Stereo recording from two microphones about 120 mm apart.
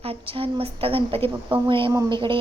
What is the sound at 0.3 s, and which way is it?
A woman's voice, 50° right (ahead or behind).